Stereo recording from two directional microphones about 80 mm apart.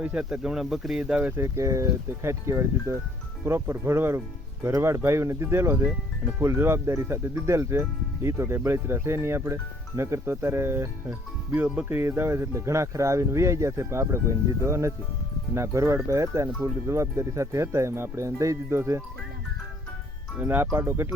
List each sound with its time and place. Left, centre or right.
0.0 s speech: centre
1.4 s speech: right
20.4 s speech: right
20.7 s speech: right